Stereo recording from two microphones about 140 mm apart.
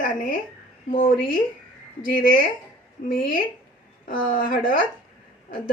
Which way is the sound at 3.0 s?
90° left.